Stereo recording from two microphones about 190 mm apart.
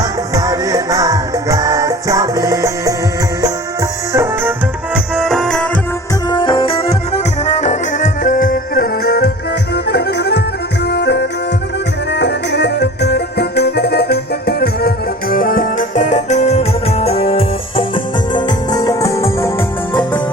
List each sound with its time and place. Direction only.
0.3 s music: 20° right (ahead or behind)
4.1 s tabla: 15° right (ahead or behind)
5.1 s music: centre (ahead or behind)
6.3 s music: 25° left (ahead or behind)